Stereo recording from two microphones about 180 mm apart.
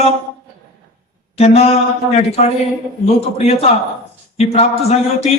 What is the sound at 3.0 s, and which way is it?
A man's voice, 35° left (ahead or behind).